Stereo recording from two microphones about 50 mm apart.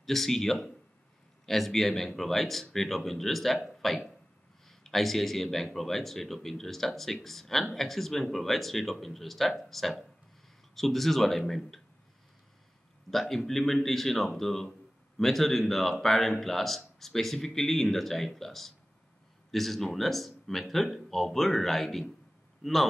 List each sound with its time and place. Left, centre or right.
0.0 s speech: centre
13.1 s a man's voice: centre